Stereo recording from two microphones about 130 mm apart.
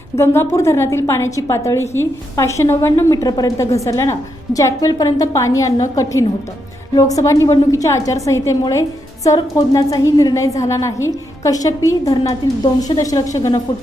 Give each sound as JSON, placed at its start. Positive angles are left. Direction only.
{"t": 0.1, "sound": "a woman's voice", "side_deg": 30}